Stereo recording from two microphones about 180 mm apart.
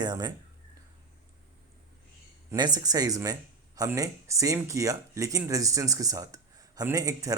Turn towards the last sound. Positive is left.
turn(degrees=-20)  # may be behind; listen again after turning